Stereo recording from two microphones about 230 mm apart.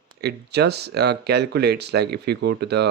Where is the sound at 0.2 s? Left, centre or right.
Right.